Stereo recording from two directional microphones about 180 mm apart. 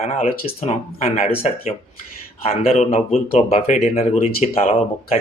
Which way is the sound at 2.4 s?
35° left (ahead or behind).